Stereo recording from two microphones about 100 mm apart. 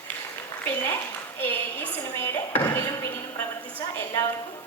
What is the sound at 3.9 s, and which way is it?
Speech, 25° left (ahead or behind).